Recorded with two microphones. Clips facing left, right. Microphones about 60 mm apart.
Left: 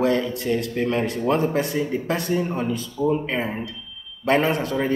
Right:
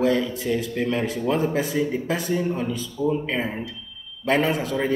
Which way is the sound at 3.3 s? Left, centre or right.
Centre.